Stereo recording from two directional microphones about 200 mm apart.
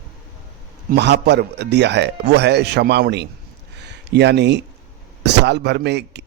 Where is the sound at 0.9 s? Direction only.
60° right (ahead or behind).